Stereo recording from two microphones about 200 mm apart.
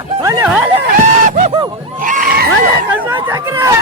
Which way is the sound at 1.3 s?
40° right (ahead or behind).